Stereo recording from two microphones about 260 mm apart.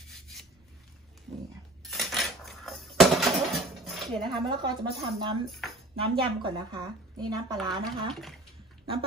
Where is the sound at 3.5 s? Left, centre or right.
Centre.